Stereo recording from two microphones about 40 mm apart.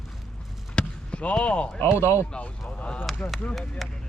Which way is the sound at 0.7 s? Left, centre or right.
Left.